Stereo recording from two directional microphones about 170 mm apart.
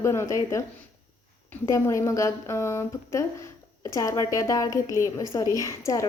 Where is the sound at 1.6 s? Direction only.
15° left (ahead or behind).